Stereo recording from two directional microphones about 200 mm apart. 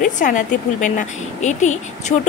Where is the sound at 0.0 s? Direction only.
40° left (ahead or behind).